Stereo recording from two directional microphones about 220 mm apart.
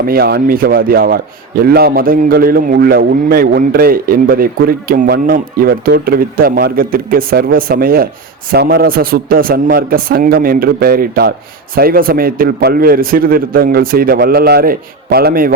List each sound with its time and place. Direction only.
0.0 s a man's voice: 45° right (ahead or behind)